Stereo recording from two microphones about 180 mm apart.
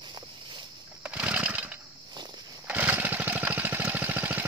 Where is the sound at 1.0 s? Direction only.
10° right (ahead or behind).